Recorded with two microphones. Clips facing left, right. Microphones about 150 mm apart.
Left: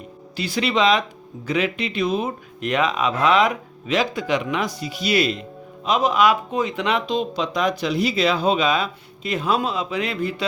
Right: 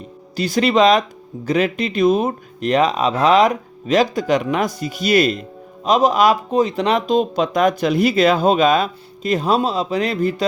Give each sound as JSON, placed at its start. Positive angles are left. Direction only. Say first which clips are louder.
{"t": 0.3, "sound": "speech", "louder": "right 6 dB", "side_deg": -45}